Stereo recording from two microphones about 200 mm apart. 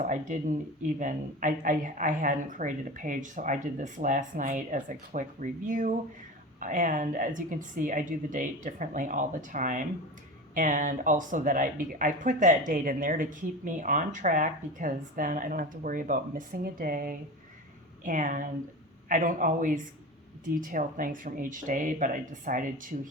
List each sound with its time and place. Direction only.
0.0 s a woman's voice: 40° right (ahead or behind)